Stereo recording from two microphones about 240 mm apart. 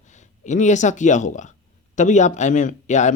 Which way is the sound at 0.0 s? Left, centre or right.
Left.